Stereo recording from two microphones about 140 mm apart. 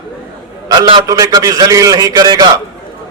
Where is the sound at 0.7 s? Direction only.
30° right (ahead or behind).